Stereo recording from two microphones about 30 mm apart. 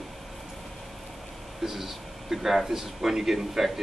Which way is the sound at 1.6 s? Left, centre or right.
Centre.